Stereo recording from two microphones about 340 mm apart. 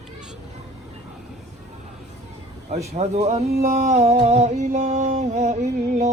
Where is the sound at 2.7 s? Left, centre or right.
Centre.